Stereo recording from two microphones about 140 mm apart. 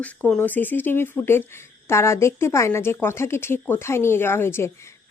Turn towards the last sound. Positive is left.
turn(degrees=15)  # may be behind; listen again after turning